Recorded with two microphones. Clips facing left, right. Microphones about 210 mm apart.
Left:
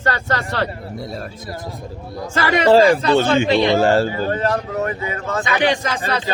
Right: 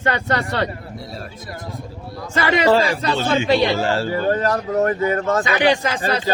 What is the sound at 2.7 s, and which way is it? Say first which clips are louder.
Speech: left 9 dB; 45° left (ahead or behind).